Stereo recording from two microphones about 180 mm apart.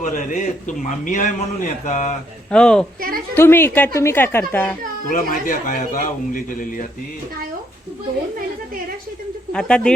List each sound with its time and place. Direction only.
0.0 s a man's voice: 45° left (ahead or behind)
2.5 s a woman's voice: 5° left (ahead or behind)
5.0 s a man's voice: 50° left (ahead or behind)
9.5 s speech: 5° left (ahead or behind)